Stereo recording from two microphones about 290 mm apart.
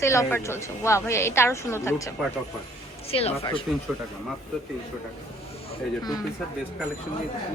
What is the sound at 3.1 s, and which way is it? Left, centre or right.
Speech, left.